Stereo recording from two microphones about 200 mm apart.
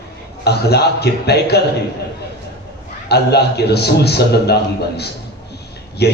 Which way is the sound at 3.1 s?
55° left (ahead or behind).